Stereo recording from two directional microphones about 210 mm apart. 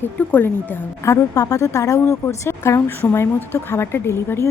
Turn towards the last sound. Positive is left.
turn(degrees=15)  # may be behind; listen again after turning